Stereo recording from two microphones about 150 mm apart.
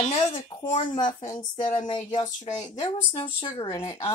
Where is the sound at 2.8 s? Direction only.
35° left (ahead or behind).